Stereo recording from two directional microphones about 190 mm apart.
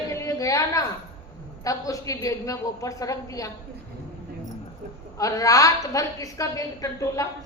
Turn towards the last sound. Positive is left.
turn(degrees=15)  # may be behind; listen again after turning